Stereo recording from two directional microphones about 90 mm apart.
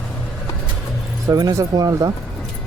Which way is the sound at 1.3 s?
40° right (ahead or behind).